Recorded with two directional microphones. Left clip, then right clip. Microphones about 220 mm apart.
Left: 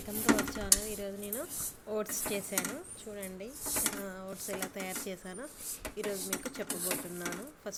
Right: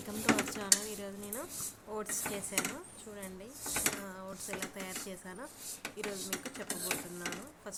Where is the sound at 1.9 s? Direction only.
10° left (ahead or behind).